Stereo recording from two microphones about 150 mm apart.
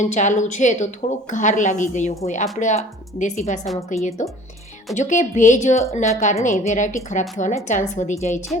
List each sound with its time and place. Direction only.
0.0 s a woman's voice: 55° left (ahead or behind)
4.9 s a woman's voice: 55° left (ahead or behind)